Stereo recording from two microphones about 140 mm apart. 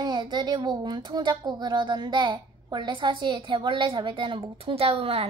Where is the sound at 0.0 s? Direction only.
30° right (ahead or behind).